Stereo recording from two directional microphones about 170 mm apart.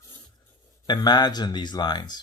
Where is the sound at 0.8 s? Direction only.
25° left (ahead or behind).